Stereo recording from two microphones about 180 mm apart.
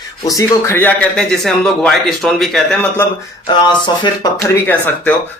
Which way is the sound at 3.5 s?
25° left (ahead or behind).